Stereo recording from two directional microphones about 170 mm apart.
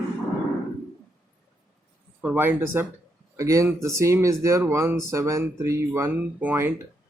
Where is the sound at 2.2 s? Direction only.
10° right (ahead or behind).